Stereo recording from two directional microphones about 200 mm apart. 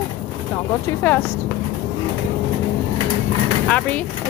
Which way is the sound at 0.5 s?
10° left (ahead or behind).